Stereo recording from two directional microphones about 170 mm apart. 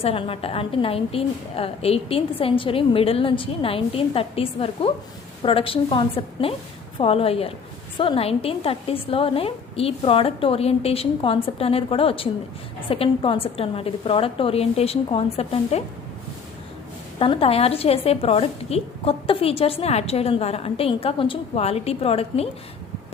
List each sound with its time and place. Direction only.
0.0 s a woman's voice: 35° left (ahead or behind)
17.2 s a woman's voice: 35° left (ahead or behind)